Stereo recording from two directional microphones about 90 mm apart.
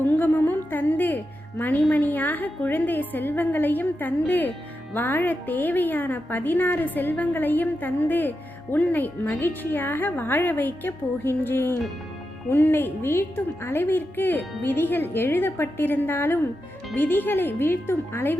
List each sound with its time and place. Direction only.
0.0 s a woman's voice: 20° left (ahead or behind)